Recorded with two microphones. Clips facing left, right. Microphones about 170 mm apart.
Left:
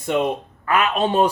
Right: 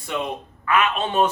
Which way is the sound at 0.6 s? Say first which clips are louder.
Left 2 dB; 40° left (ahead or behind).